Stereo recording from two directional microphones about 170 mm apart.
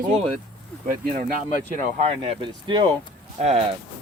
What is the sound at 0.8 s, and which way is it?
Speech, 55° right (ahead or behind).